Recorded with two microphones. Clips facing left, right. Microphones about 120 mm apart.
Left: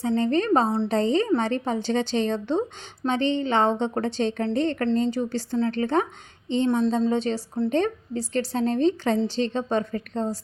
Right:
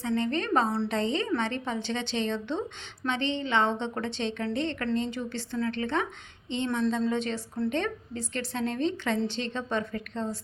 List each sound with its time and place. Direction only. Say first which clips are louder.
0.0 s a woman's voice: left 6 dB; 35° left (ahead or behind)